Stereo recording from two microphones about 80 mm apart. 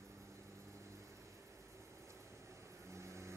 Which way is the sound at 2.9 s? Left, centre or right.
Right.